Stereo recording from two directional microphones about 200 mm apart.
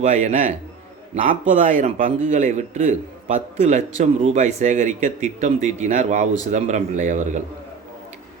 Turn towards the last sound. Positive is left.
turn(degrees=-40)  # may be behind; listen again after turning